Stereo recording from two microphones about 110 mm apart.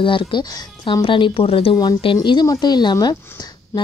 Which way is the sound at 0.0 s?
50° left (ahead or behind).